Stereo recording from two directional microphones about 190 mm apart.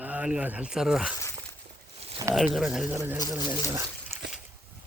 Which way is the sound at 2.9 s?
15° right (ahead or behind).